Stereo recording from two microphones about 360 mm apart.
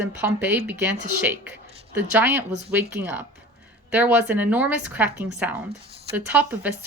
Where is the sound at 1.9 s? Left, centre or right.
Centre.